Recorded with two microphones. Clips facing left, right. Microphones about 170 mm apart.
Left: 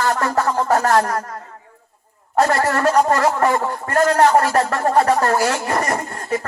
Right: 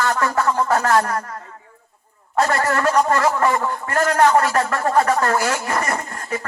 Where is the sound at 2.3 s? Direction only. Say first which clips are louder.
Left 2 dB; 40° left (ahead or behind).